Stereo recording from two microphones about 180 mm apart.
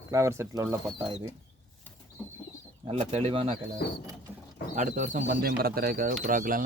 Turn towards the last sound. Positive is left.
turn(degrees=-50)  # may be behind; listen again after turning